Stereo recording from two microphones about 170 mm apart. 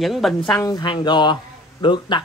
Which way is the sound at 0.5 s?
20° left (ahead or behind).